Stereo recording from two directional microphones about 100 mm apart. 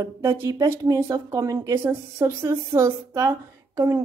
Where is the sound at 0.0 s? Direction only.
30° right (ahead or behind).